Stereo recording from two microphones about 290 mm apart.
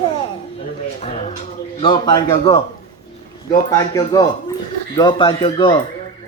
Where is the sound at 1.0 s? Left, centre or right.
Left.